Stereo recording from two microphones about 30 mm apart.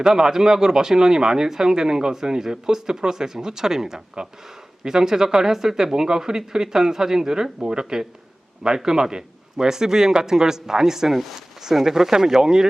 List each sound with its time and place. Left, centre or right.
0.0 s speech: centre
11.1 s speech: centre
11.3 s speech: centre